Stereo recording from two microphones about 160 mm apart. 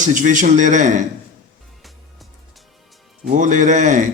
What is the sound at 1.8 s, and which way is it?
Music, centre (ahead or behind).